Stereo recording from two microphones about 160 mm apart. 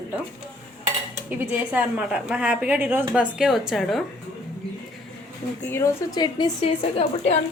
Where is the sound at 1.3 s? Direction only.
10° right (ahead or behind).